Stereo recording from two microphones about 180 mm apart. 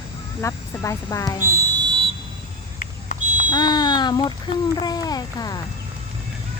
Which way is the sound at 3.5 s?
25° left (ahead or behind).